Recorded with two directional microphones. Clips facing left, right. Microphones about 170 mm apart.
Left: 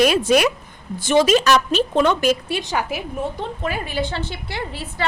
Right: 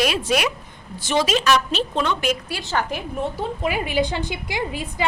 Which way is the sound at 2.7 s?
10° left (ahead or behind).